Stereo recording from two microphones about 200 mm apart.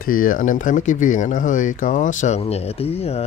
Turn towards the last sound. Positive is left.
turn(degrees=30)  # may be behind; listen again after turning